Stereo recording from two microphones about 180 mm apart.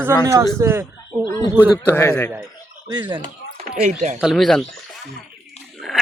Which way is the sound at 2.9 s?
25° right (ahead or behind).